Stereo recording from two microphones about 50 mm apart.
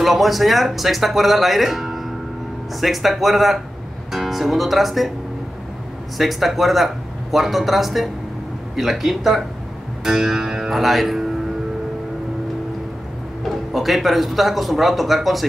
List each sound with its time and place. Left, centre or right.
0.0 s speech: centre
6.1 s speech: centre
13.4 s speech: centre